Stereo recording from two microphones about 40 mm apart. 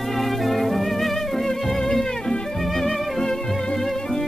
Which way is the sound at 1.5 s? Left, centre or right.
Centre.